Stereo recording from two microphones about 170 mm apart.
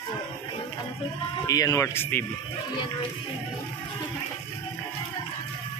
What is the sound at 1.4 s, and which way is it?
Speech, 20° left (ahead or behind).